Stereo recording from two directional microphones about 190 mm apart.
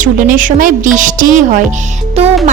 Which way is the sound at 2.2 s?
30° right (ahead or behind).